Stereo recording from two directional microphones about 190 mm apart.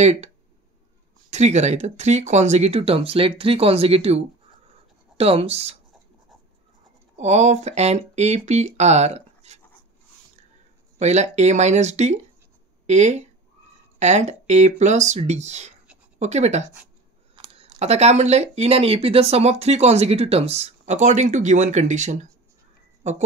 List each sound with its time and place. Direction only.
0.0 s speech: 35° right (ahead or behind)
1.3 s speech: 35° right (ahead or behind)
7.2 s speech: 35° right (ahead or behind)
11.0 s speech: 35° right (ahead or behind)